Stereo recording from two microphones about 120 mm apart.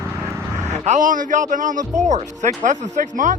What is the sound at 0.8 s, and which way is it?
Speech, 90° right.